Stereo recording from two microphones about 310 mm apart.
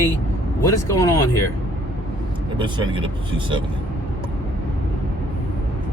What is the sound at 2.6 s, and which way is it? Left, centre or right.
Speech, centre.